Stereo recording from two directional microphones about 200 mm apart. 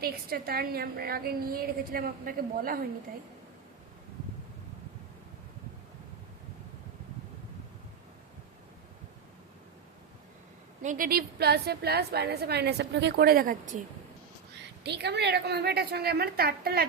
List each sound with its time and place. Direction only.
0.0 s a woman's voice: 50° right (ahead or behind)
10.8 s a woman's voice: 45° right (ahead or behind)
14.6 s a woman's voice: 60° right (ahead or behind)